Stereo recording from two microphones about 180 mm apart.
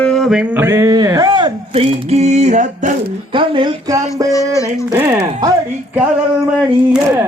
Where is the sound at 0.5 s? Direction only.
15° right (ahead or behind); by 2.9 s 40° right (ahead or behind).